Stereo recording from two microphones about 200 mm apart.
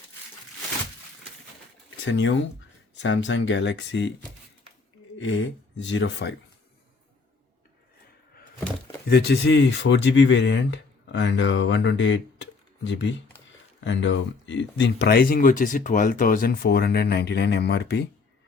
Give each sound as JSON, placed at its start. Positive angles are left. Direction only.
{"t": 2.0, "sound": "speech", "side_deg": 65}
{"t": 5.7, "sound": "speech", "side_deg": 65}
{"t": 9.0, "sound": "speech", "side_deg": 55}